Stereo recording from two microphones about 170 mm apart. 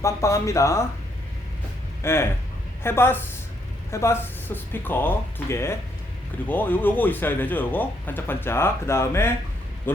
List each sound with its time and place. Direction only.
0.0 s a man's voice: 20° left (ahead or behind)
2.0 s a man's voice: 15° left (ahead or behind)